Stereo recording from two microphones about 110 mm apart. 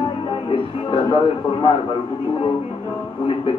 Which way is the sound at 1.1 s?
55° left (ahead or behind).